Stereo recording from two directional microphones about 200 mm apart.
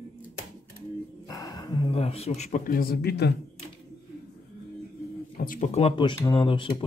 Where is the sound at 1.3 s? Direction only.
20° left (ahead or behind); by 3.3 s 55° left (ahead or behind).